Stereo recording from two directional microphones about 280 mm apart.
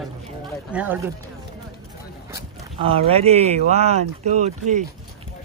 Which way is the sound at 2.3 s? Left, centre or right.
Centre.